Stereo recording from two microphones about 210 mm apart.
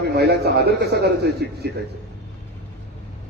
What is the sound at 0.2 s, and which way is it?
A man's voice, 50° right (ahead or behind).